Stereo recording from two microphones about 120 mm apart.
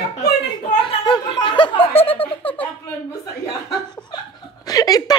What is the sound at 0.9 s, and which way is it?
Speech, 40° left (ahead or behind).